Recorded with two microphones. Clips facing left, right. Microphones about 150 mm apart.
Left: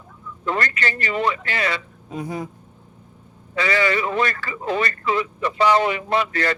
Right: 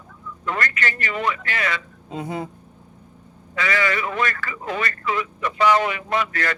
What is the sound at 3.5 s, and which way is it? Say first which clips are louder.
A man's voice: left 3 dB; 30° left (ahead or behind).